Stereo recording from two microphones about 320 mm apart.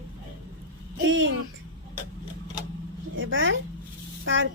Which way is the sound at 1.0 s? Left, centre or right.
Right.